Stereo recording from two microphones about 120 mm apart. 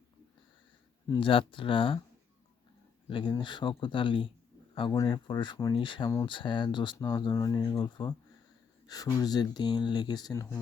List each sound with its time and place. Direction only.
1.2 s speech: 45° left (ahead or behind)
3.1 s speech: 45° left (ahead or behind)
7.3 s speech: 30° left (ahead or behind)